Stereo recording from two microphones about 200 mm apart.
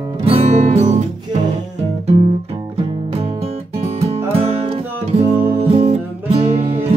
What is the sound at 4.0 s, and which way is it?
Music, 30° right (ahead or behind).